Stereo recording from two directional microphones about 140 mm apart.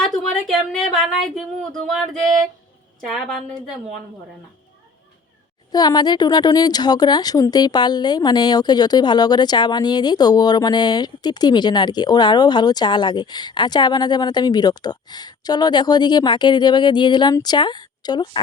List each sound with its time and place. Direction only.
0.0 s a woman's voice: centre (ahead or behind)
5.7 s a woman's voice: 30° left (ahead or behind)